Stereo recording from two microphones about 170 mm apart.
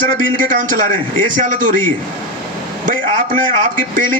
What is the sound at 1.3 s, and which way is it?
Speech, 50° right (ahead or behind).